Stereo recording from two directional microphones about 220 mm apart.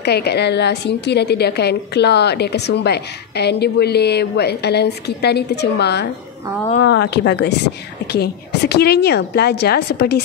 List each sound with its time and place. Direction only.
0.0 s a woman's voice: 50° left (ahead or behind)